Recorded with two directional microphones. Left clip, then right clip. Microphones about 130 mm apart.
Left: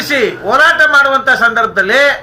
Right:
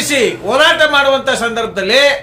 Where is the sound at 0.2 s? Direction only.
10° right (ahead or behind).